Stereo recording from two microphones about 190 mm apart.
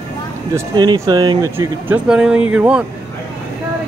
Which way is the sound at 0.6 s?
20° right (ahead or behind).